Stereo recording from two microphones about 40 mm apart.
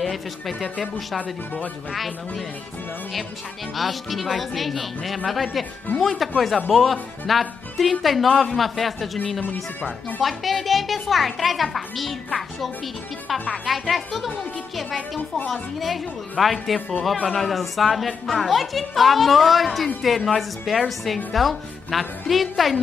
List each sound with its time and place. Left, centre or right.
0.0 s a woman's voice: centre
1.2 s speech: left
1.9 s a woman's voice: centre
3.7 s a woman's voice: centre
9.4 s speech: left
10.2 s a woman's voice: centre
15.5 s a woman's voice: centre